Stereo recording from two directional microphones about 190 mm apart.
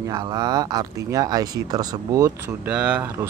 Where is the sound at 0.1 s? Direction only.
20° right (ahead or behind).